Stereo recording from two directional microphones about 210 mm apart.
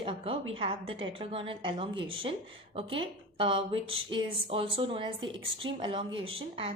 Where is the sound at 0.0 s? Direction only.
25° right (ahead or behind).